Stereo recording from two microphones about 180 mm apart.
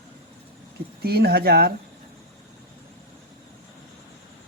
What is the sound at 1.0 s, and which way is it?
Speech, 60° right (ahead or behind).